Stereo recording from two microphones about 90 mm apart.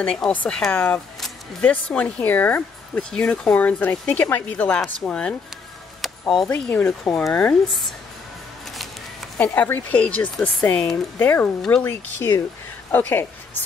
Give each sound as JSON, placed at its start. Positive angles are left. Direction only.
{"t": 0.0, "sound": "speech", "side_deg": 10}
{"t": 5.9, "sound": "music", "side_deg": 0}
{"t": 6.7, "sound": "speech", "side_deg": 15}
{"t": 9.4, "sound": "speech", "side_deg": 15}
{"t": 11.1, "sound": "a woman's voice", "side_deg": 20}
{"t": 11.8, "sound": "a woman's voice", "side_deg": 30}